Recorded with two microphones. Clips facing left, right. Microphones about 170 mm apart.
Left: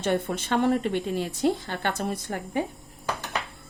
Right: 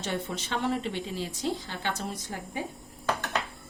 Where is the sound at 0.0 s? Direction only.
55° left (ahead or behind).